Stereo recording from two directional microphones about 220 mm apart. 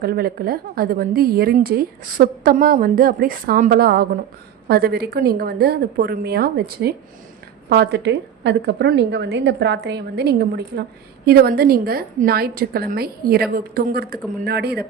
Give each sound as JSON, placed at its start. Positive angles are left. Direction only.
{"t": 0.0, "sound": "a woman's voice", "side_deg": -45}